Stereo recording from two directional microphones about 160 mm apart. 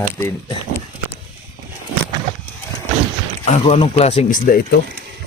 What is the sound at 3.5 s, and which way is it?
Speech, 35° left (ahead or behind).